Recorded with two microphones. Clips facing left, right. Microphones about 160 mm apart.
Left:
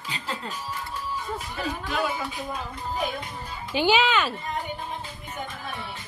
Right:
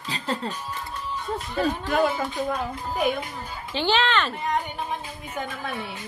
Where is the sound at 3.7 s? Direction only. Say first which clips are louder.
Left 1 dB; 10° left (ahead or behind).